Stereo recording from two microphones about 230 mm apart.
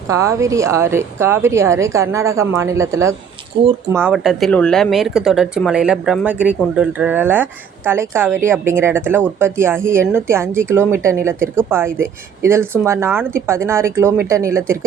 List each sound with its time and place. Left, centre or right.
0.1 s speech: centre
3.9 s speech: centre